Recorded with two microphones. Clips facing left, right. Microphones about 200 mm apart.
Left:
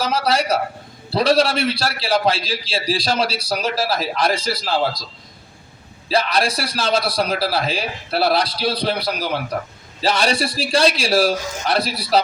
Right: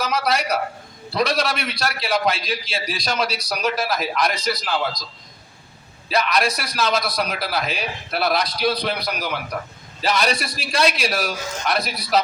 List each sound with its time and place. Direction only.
0.0 s a man's voice: 30° left (ahead or behind)
6.1 s a man's voice: 30° left (ahead or behind)